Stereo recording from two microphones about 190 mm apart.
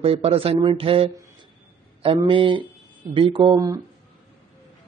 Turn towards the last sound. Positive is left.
turn(degrees=-15)  # may be behind; listen again after turning